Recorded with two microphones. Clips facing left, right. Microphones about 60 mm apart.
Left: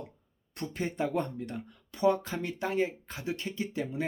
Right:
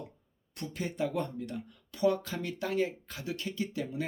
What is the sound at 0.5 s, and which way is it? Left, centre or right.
Speech, left.